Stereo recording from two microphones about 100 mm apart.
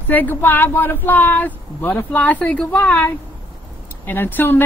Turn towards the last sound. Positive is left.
turn(degrees=20)  # may be behind; listen again after turning